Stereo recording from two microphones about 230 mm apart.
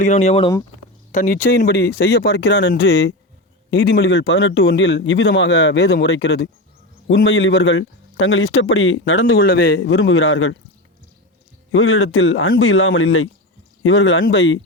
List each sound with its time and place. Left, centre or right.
0.0 s speech: left
1.5 s a man's voice: left
9.4 s a man's voice: left
9.8 s speech: left
11.7 s speech: left